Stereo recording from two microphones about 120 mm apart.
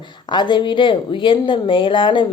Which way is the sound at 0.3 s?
40° left (ahead or behind).